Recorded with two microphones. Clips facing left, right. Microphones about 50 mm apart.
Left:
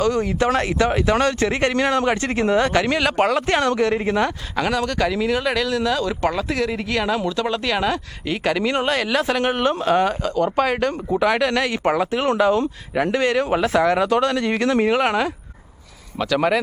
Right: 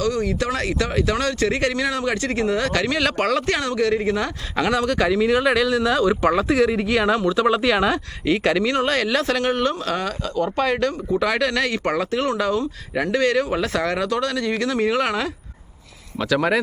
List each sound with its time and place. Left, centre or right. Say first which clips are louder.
0.0 s speech: left 3 dB; left
1.7 s speech: left 4 dB; left
3.0 s speech: left 2 dB; centre
3.4 s speech: left 2 dB; left
4.5 s speech: right 3 dB; centre; by 12.6 s left
12.9 s speech: left 2 dB; centre
13.1 s speech: right 1 dB; left
14.1 s speech: left 3 dB; left
14.8 s speech: left 2 dB; centre
16.1 s speech: left 1 dB; centre